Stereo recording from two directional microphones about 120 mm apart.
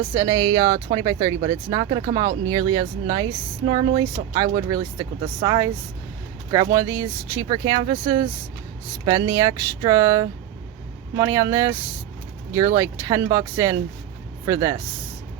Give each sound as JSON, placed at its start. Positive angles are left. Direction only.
{"t": 0.1, "sound": "speech", "side_deg": -30}
{"t": 3.7, "sound": "speech", "side_deg": -55}
{"t": 4.4, "sound": "speech", "side_deg": -30}
{"t": 7.4, "sound": "speech", "side_deg": -45}
{"t": 9.0, "sound": "speech", "side_deg": -30}